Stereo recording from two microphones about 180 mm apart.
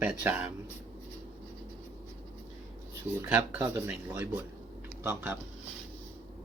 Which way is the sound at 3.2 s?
10° right (ahead or behind).